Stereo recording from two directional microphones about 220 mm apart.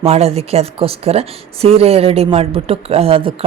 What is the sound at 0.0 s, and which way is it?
Speech, 25° right (ahead or behind).